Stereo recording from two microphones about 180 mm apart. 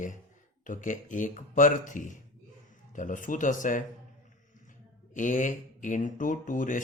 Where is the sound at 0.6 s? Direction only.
45° left (ahead or behind).